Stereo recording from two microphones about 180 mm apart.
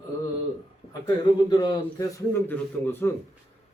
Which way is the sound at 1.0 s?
25° left (ahead or behind).